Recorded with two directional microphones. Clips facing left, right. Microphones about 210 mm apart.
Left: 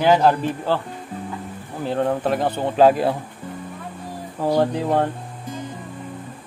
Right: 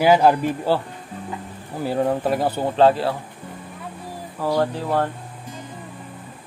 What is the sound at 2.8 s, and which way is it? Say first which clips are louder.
Speech: left 2 dB; 15° left (ahead or behind).